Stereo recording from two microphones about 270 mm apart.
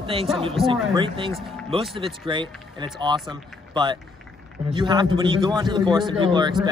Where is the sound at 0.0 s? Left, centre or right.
Centre.